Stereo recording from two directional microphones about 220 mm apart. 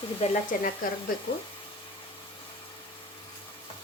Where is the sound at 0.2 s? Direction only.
30° left (ahead or behind).